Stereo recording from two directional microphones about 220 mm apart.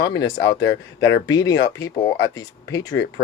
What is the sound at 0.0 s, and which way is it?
Speech, 15° left (ahead or behind).